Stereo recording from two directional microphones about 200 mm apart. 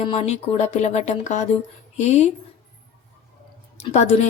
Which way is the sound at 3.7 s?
35° left (ahead or behind).